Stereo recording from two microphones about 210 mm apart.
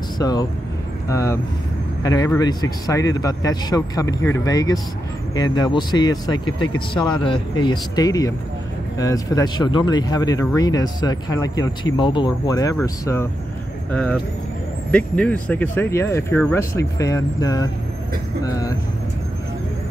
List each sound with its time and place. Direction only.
0.2 s speech: 20° left (ahead or behind)